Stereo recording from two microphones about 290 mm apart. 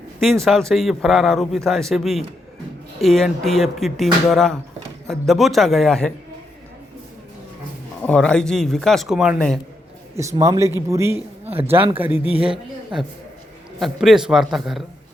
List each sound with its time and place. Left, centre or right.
0.2 s speech: centre
8.0 s a man's voice: centre
11.4 s speech: right
11.7 s a man's voice: centre